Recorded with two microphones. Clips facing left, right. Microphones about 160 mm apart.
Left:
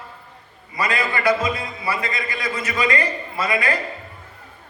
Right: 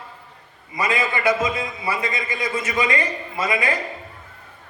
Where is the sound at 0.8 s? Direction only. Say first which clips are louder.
Even; 20° right (ahead or behind).